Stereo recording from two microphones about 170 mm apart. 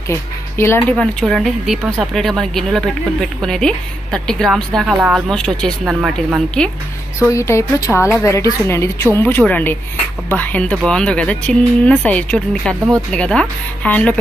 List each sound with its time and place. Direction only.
0.1 s speech: 15° left (ahead or behind)
7.2 s speech: 15° left (ahead or behind)